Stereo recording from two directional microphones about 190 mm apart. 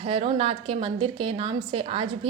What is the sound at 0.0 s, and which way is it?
A woman's voice, 30° right (ahead or behind).